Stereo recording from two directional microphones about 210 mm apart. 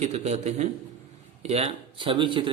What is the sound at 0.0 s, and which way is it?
Speech, 30° right (ahead or behind).